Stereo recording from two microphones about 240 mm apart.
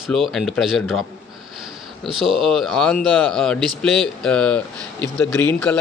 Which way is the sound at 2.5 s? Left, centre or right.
Centre.